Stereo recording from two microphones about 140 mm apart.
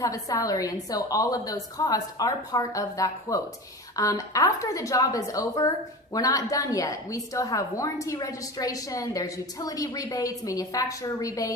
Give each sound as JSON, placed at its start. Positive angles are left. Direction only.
{"t": 0.0, "sound": "a woman's voice", "side_deg": 25}